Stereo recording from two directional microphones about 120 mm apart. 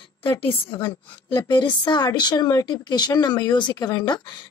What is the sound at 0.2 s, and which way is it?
A woman's voice, 45° left (ahead or behind).